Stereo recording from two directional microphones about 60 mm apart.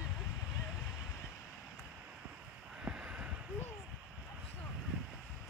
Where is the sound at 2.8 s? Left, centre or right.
Centre.